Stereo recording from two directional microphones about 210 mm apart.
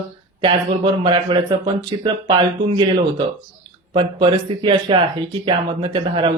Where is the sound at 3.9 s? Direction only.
20° right (ahead or behind).